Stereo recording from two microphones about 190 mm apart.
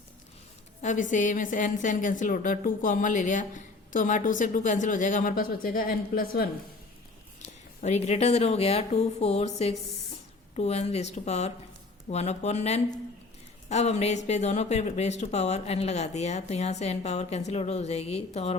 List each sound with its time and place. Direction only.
0.8 s a woman's voice: 40° left (ahead or behind)
7.8 s speech: 35° left (ahead or behind)